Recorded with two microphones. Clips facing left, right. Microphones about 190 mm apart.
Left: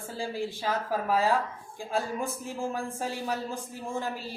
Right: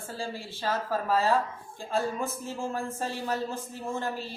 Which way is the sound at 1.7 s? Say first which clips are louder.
Right 1 dB; 15° left (ahead or behind).